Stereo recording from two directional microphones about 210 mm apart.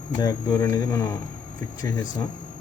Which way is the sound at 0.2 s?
15° left (ahead or behind).